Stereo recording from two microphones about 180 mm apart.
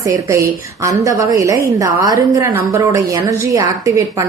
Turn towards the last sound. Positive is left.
turn(degrees=-20)  # may be behind; listen again after turning